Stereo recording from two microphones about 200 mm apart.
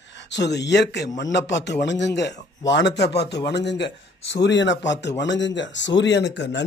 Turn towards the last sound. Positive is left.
turn(degrees=60)  # may be behind; listen again after turning